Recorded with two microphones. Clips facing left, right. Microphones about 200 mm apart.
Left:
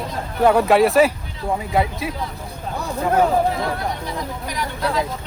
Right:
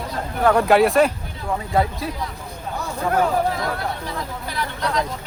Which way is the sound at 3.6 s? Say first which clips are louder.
Left 2 dB; 15° left (ahead or behind).